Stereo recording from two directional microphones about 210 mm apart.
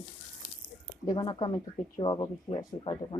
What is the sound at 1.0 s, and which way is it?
Speech, 20° left (ahead or behind).